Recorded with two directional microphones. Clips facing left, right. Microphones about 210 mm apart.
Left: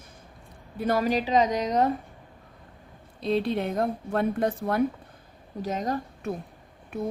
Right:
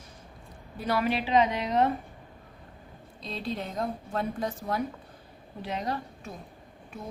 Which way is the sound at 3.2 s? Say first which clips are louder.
Left 9 dB; 60° left (ahead or behind).